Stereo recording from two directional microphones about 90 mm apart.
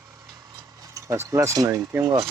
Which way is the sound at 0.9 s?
30° right (ahead or behind).